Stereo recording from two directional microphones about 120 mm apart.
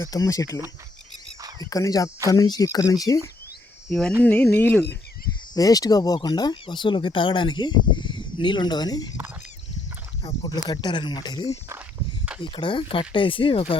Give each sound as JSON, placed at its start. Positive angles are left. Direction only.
{"t": 0.0, "sound": "speech", "side_deg": 30}
{"t": 1.4, "sound": "a sound", "side_deg": -35}
{"t": 1.7, "sound": "speech", "side_deg": 30}
{"t": 4.2, "sound": "speech", "side_deg": 10}
{"t": 5.5, "sound": "speech", "side_deg": 30}
{"t": 10.4, "sound": "speech", "side_deg": 35}